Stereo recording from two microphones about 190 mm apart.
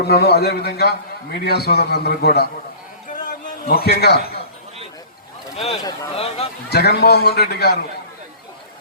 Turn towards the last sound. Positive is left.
turn(degrees=55)  # may be behind; listen again after turning